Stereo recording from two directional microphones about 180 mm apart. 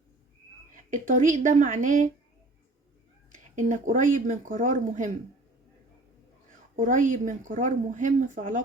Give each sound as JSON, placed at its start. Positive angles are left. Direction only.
{"t": 0.9, "sound": "speech", "side_deg": -45}
{"t": 3.5, "sound": "speech", "side_deg": -45}
{"t": 6.7, "sound": "speech", "side_deg": -45}